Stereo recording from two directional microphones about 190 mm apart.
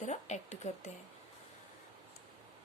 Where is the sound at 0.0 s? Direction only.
40° left (ahead or behind).